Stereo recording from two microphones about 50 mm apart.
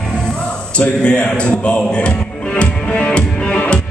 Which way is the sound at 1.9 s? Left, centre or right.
Left.